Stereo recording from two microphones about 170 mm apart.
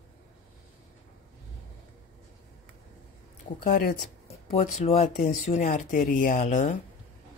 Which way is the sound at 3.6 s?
65° left (ahead or behind).